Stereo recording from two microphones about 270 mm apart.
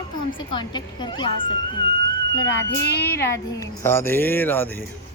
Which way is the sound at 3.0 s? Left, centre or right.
Centre.